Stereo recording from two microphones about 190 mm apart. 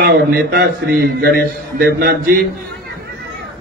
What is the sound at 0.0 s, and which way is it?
A man's voice, 60° right (ahead or behind).